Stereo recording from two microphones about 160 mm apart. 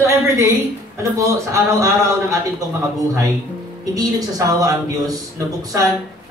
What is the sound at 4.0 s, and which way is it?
Speech, 25° right (ahead or behind).